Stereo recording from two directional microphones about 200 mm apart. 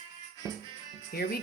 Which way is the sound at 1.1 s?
50° left (ahead or behind).